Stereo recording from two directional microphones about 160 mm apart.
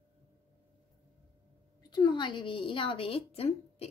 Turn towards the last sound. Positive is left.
turn(degrees=40)  # may be behind; listen again after turning